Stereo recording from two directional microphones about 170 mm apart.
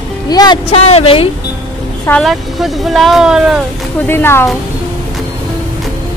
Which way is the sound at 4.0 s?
15° left (ahead or behind).